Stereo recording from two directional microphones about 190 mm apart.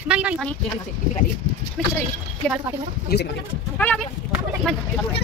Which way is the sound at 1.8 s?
5° left (ahead or behind).